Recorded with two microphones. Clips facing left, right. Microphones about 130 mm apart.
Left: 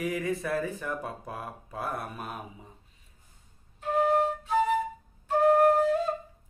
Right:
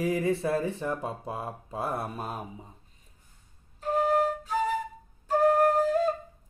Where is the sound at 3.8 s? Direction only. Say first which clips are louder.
Even; 35° right (ahead or behind).